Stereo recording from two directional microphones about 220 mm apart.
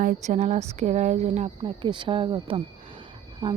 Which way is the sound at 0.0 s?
30° right (ahead or behind).